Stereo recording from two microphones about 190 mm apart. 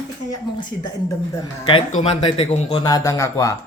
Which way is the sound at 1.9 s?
30° left (ahead or behind).